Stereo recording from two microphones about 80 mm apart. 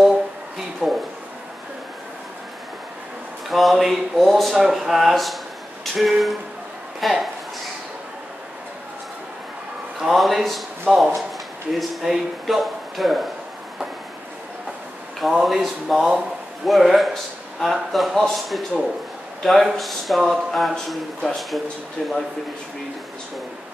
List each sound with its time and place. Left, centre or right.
0.8 s a sound: centre
3.4 s speech: centre
9.9 s speech: centre
15.1 s a man's voice: centre